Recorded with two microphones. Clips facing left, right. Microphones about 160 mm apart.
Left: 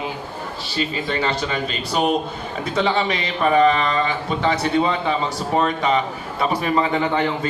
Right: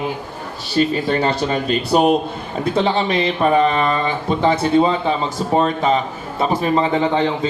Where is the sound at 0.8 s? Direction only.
40° right (ahead or behind).